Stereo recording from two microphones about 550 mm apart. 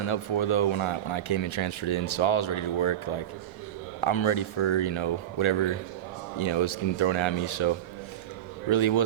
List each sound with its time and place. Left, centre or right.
0.0 s speech: left
8.7 s speech: left